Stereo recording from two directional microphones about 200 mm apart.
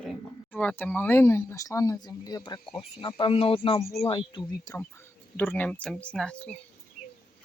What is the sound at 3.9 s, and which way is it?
Speech, 15° left (ahead or behind).